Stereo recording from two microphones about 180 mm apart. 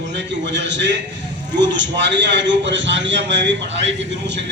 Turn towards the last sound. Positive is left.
turn(degrees=-80)